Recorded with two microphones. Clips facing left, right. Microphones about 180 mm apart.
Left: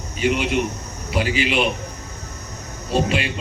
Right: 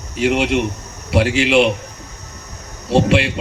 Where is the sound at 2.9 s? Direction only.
75° right (ahead or behind).